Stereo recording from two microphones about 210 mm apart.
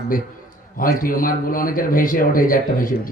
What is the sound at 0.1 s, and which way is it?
Speech, 40° left (ahead or behind).